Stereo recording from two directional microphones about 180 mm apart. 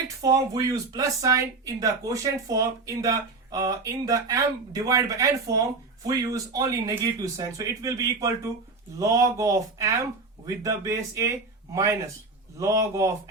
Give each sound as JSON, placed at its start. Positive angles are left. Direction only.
{"t": 0.2, "sound": "speech", "side_deg": -20}